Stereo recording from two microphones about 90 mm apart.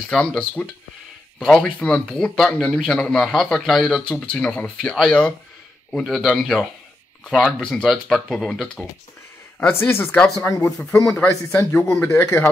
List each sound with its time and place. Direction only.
0.1 s speech: 5° left (ahead or behind)
9.7 s speech: 25° left (ahead or behind)
10.4 s speech: 15° left (ahead or behind)